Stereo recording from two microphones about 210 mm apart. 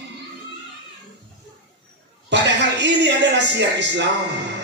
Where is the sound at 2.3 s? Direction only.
55° right (ahead or behind).